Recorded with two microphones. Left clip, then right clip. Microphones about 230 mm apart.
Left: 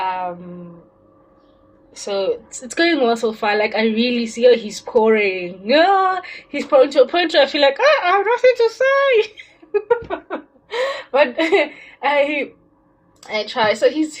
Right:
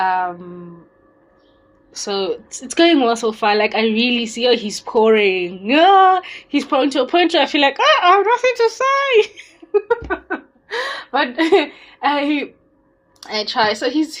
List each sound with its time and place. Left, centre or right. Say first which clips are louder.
0.0 s a sound: right 4 dB; right
2.0 s a woman's voice: left 1 dB; right
11.3 s a woman's voice: right 1 dB; right